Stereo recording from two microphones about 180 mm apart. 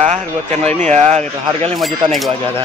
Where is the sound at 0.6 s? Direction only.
40° right (ahead or behind).